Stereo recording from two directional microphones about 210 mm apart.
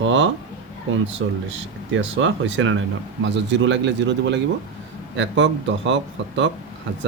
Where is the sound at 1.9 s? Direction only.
60° right (ahead or behind).